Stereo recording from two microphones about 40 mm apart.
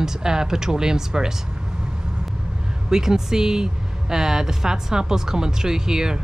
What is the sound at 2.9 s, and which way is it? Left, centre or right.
Speech, centre.